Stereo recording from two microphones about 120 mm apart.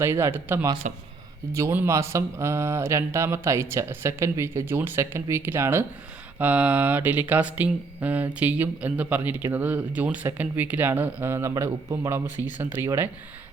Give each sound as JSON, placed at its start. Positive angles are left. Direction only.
{"t": 0.0, "sound": "speech", "side_deg": -20}